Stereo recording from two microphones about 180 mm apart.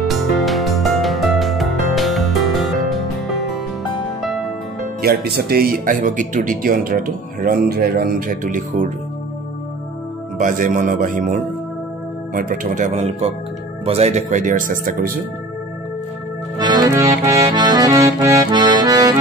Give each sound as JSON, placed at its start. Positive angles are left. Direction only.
{"t": 0.1, "sound": "music", "side_deg": 0}
{"t": 5.0, "sound": "speech", "side_deg": -60}
{"t": 10.4, "sound": "speech", "side_deg": -50}
{"t": 16.5, "sound": "music", "side_deg": -20}
{"t": 17.1, "sound": "accordion", "side_deg": -15}